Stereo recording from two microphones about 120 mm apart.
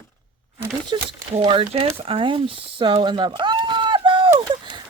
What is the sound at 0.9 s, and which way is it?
Speech, 40° right (ahead or behind).